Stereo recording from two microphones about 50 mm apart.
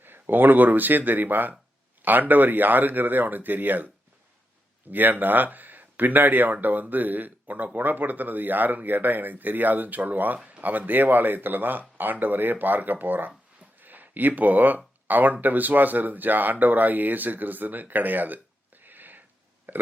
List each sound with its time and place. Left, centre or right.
0.0 s speech: right
4.9 s speech: right
19.7 s burping: right